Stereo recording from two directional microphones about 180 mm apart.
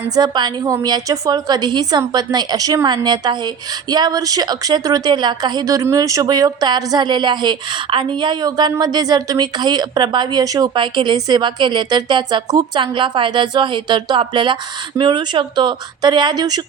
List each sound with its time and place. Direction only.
0.2 s a woman's voice: 25° right (ahead or behind)